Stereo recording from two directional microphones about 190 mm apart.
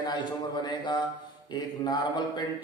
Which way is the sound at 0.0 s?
20° left (ahead or behind).